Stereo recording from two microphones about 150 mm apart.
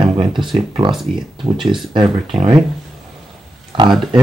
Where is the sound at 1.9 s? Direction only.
35° right (ahead or behind).